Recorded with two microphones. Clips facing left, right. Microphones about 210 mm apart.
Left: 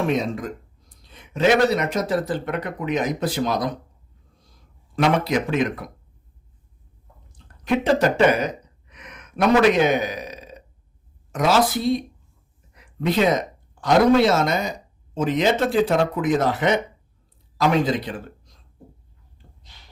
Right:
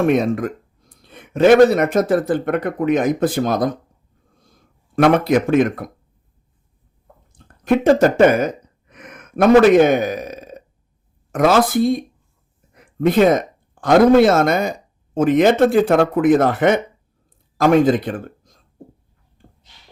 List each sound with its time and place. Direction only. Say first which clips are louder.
0.0 s speech: right 6 dB; 55° right (ahead or behind)
4.4 s a sound: right 4 dB; 50° right (ahead or behind)
7.3 s gasp: right 5 dB; 50° right (ahead or behind)
11.3 s speech: right 5 dB; 55° right (ahead or behind)
12.7 s a sound: right 6 dB; 50° right (ahead or behind)
13.8 s a man's voice: right 5 dB; 50° right (ahead or behind)